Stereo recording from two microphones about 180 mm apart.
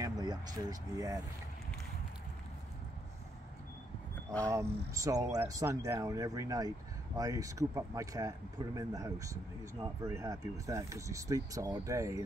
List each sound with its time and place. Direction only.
0.0 s speech: 20° right (ahead or behind)
4.5 s speech: 15° right (ahead or behind)